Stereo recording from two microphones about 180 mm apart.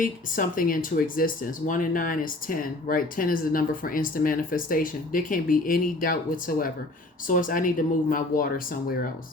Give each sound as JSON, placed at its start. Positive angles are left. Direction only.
{"t": 0.0, "sound": "speech", "side_deg": 50}